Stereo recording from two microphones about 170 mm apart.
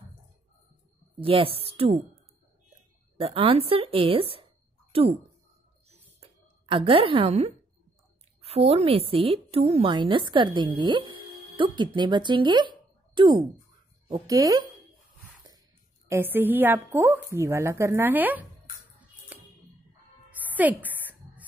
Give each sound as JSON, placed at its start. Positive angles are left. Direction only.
{"t": 1.2, "sound": "a woman's voice", "side_deg": -35}
{"t": 3.2, "sound": "a woman's voice", "side_deg": -35}
{"t": 6.9, "sound": "a woman's voice", "side_deg": -30}
{"t": 16.1, "sound": "a woman's voice", "side_deg": -10}
{"t": 19.3, "sound": "ding", "side_deg": -10}
{"t": 20.3, "sound": "a sound", "side_deg": -10}